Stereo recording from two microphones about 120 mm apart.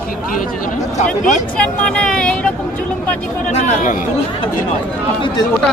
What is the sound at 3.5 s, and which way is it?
Speech, 80° left.